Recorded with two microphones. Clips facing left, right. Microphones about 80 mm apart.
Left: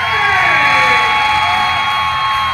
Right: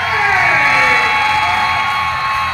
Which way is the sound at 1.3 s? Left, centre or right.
Centre.